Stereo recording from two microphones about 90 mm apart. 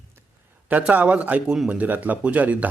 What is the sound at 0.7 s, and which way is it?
Speech, 15° right (ahead or behind).